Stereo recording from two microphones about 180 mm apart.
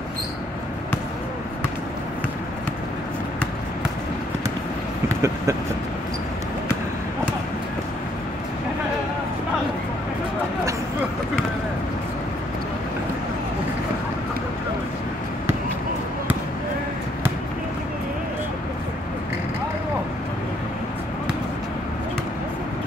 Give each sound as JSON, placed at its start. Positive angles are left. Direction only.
{"t": 5.0, "sound": "vehicle", "side_deg": -15}